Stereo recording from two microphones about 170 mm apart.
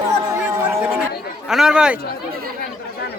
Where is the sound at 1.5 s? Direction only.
5° right (ahead or behind).